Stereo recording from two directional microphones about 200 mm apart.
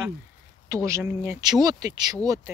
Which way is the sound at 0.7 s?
15° right (ahead or behind).